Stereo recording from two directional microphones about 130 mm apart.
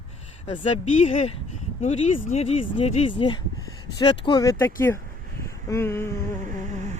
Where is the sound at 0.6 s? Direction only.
60° left (ahead or behind); by 6.1 s 20° left (ahead or behind).